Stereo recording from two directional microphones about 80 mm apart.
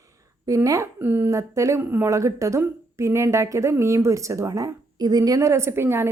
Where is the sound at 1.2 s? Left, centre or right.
Right.